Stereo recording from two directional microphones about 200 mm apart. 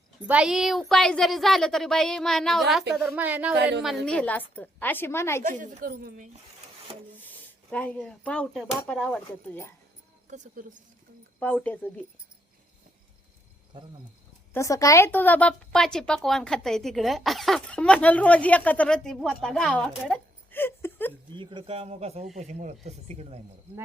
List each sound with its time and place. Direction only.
0.3 s a woman's voice: 5° right (ahead or behind)
3.6 s a woman's voice: 55° right (ahead or behind)
4.0 s a woman's voice: 5° left (ahead or behind)
5.4 s a woman's voice: 40° right (ahead or behind)
7.2 s a woman's voice: 10° left (ahead or behind)
10.2 s speech: 40° right (ahead or behind)
11.3 s a woman's voice: 10° left (ahead or behind)
14.5 s a woman's voice: 15° left (ahead or behind)
21.3 s speech: 25° right (ahead or behind)